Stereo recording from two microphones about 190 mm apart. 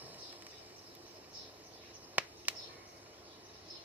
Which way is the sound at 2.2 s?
10° right (ahead or behind).